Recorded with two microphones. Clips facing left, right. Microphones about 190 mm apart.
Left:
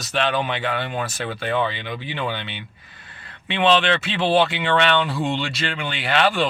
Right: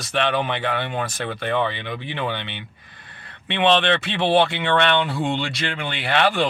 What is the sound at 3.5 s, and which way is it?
Speech, 60° right (ahead or behind).